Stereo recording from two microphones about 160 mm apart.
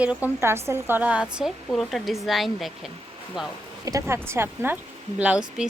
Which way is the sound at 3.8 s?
20° right (ahead or behind).